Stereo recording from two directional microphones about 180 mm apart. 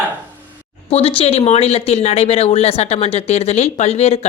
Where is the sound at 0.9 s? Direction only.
35° left (ahead or behind).